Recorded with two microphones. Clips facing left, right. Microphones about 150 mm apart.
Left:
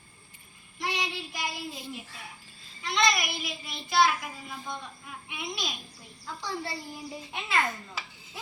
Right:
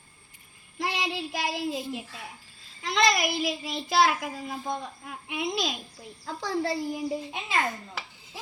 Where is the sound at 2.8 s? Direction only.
90° right.